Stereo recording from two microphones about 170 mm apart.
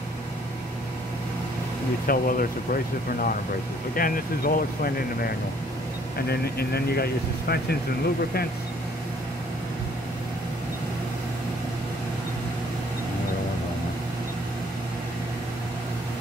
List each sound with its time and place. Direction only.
2.0 s speech: 55° left (ahead or behind)